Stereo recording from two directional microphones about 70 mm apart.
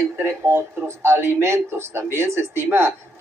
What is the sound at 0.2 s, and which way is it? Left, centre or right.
Speech, right.